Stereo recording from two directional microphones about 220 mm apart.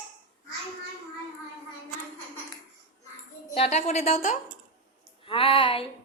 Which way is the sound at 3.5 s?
30° left (ahead or behind).